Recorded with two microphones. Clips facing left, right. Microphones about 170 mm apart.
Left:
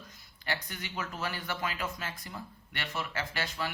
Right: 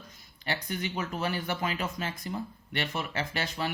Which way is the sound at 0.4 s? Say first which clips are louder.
Right 5 dB; 20° right (ahead or behind).